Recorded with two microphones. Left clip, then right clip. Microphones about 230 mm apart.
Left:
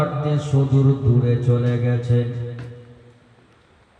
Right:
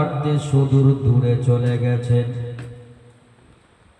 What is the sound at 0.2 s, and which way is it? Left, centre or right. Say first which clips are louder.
A man's voice: right 1 dB; right.